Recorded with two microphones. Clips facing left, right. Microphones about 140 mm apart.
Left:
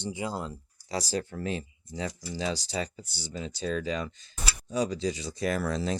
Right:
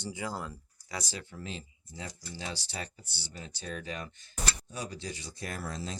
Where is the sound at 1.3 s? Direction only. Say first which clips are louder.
Left 9 dB; 60° left (ahead or behind); by 2.1 s 80° left.